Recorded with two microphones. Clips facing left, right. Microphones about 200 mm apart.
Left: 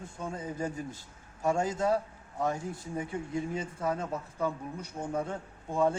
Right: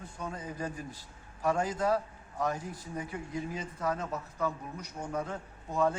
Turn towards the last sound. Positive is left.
turn(degrees=25)  # may be behind; listen again after turning